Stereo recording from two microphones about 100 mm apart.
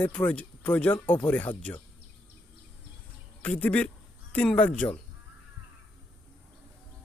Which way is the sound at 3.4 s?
15° left (ahead or behind).